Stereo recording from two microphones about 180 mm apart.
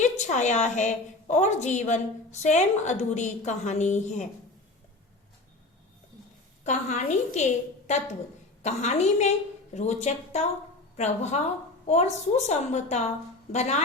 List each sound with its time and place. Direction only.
0.0 s a woman's voice: 40° left (ahead or behind)
6.7 s a woman's voice: 40° left (ahead or behind)